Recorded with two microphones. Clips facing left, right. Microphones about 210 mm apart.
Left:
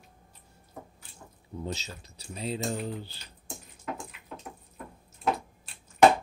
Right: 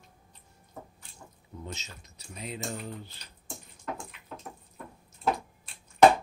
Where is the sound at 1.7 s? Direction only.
30° left (ahead or behind).